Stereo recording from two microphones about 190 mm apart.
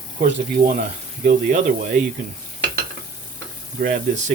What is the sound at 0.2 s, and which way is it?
Speech, 45° right (ahead or behind).